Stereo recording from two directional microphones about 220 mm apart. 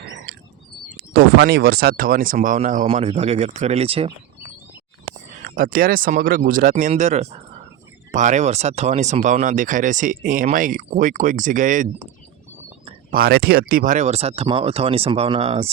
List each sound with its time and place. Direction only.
1.1 s speech: 45° right (ahead or behind); by 4.1 s 25° right (ahead or behind)
5.5 s speech: 40° right (ahead or behind)